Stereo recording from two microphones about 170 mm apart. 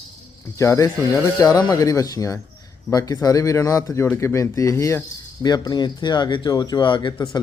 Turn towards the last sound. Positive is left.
turn(degrees=25)  # may be behind; listen again after turning